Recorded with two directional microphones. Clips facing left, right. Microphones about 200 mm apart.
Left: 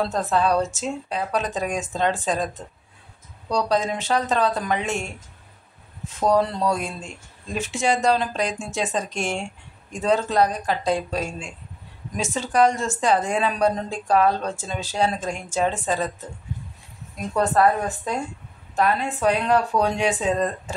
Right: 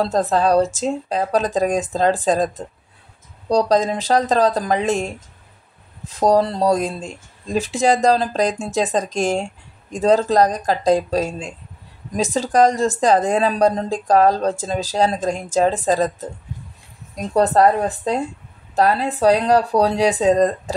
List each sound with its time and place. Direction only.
0.0 s speech: 35° right (ahead or behind)
17.1 s speech: 35° right (ahead or behind)